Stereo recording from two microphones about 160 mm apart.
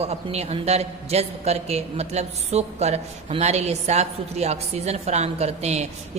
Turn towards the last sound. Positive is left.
turn(degrees=-45)  # may be behind; listen again after turning